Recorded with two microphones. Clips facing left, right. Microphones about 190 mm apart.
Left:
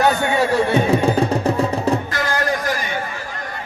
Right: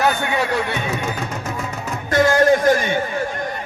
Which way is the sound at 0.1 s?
35° left (ahead or behind).